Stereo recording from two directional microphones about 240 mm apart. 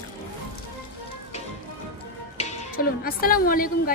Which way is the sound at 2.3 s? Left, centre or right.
Left.